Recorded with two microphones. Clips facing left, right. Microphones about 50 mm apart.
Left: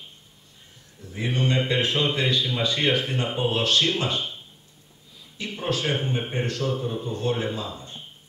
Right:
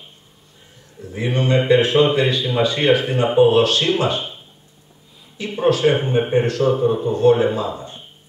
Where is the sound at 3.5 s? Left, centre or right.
Right.